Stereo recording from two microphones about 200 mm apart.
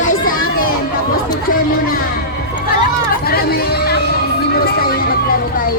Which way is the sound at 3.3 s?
50° left (ahead or behind).